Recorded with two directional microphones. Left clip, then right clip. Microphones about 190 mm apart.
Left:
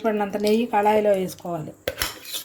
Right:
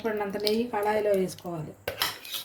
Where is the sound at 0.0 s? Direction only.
40° left (ahead or behind).